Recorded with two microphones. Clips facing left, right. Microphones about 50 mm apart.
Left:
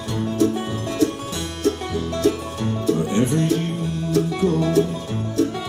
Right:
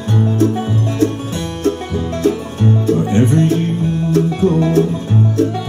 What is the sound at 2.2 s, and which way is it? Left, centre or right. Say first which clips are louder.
Music: right 6 dB; right.